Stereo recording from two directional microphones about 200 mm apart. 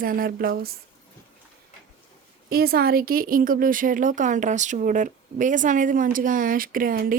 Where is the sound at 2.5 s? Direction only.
50° right (ahead or behind).